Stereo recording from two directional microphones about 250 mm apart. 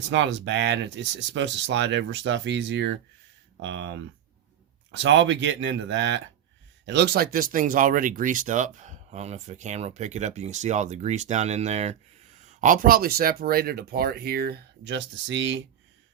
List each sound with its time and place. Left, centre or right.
0.1 s speech: right